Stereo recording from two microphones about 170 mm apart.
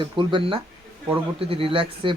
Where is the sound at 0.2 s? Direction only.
30° right (ahead or behind).